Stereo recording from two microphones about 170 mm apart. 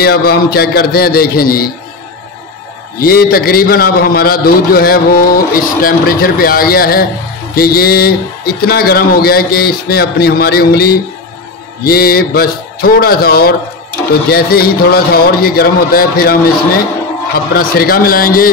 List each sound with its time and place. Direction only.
0.0 s a man's voice: 65° left (ahead or behind)
3.0 s a man's voice: 60° left (ahead or behind)
17.6 s a man's voice: 60° left (ahead or behind)